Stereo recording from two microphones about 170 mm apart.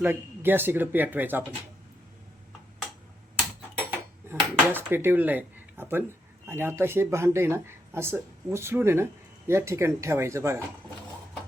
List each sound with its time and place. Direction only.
0.0 s speech: 10° right (ahead or behind)
4.3 s dishes: 15° right (ahead or behind)
6.5 s speech: 15° right (ahead or behind)